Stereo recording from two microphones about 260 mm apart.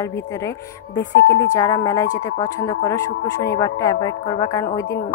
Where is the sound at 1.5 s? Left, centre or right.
Centre.